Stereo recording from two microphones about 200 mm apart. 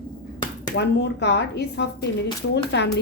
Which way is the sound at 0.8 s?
60° left (ahead or behind).